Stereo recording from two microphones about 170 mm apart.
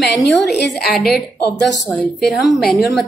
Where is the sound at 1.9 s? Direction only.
Centre (ahead or behind).